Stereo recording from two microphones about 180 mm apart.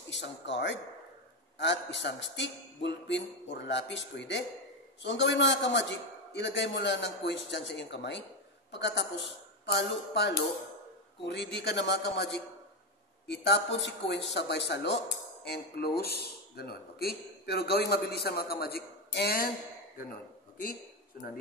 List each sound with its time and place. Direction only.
0.1 s a man's voice: 85° left; by 19.5 s 60° left (ahead or behind)